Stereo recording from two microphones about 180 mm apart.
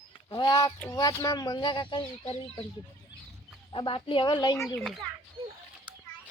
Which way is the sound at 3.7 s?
30° left (ahead or behind).